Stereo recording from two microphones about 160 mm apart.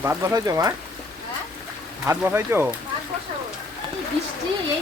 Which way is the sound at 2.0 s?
15° right (ahead or behind).